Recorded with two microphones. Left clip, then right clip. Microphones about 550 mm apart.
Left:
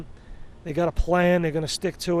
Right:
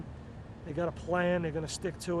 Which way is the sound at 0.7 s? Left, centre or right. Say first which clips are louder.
Left 9 dB; left.